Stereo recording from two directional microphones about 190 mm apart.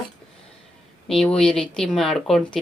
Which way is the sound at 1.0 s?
5° left (ahead or behind).